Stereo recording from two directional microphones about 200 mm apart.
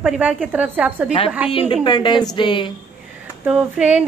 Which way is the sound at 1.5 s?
25° left (ahead or behind).